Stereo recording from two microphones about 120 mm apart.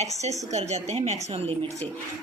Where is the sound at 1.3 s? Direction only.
55° right (ahead or behind).